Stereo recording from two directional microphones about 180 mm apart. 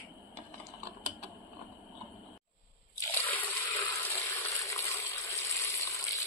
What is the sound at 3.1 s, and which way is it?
Water, 10° left (ahead or behind).